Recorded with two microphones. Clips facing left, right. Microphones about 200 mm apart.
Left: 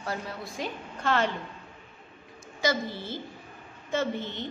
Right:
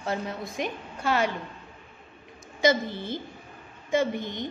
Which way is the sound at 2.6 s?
20° right (ahead or behind).